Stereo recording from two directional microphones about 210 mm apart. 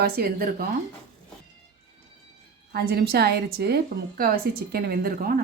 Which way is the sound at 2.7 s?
50° right (ahead or behind).